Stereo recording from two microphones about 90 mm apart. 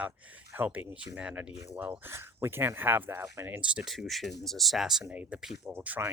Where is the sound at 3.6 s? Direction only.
10° right (ahead or behind).